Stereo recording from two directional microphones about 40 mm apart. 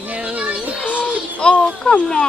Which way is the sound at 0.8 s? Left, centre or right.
Left.